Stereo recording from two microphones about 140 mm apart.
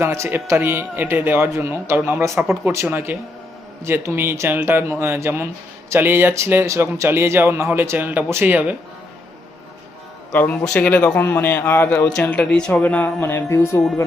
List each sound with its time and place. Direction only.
0.0 s speech: 20° right (ahead or behind)
10.3 s speech: 10° left (ahead or behind)